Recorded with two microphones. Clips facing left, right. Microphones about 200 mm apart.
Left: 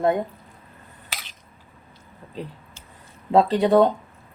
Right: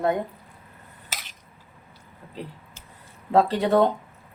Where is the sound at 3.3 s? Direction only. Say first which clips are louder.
Left 3 dB; 15° left (ahead or behind).